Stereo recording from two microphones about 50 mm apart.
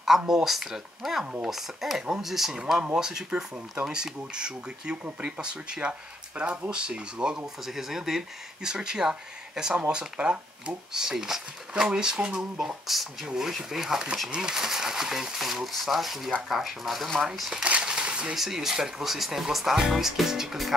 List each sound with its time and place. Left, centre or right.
0.3 s speech: centre
2.5 s speech: centre
7.6 s speech: centre
17.6 s a sound: centre
18.3 s speech: centre